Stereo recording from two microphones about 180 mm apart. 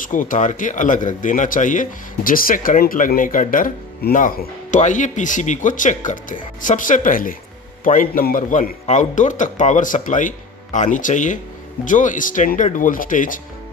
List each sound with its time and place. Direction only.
0.0 s speech: 45° left (ahead or behind)